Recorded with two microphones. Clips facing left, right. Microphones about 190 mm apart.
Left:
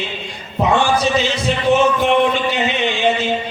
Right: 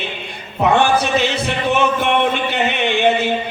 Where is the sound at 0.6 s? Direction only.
60° right (ahead or behind).